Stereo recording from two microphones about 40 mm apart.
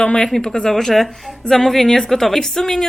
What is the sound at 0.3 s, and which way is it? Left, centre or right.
A woman's voice, centre.